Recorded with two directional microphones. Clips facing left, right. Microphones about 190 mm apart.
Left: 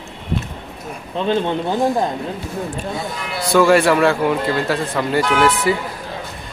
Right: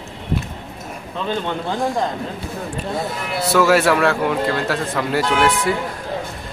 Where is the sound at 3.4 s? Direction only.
5° right (ahead or behind).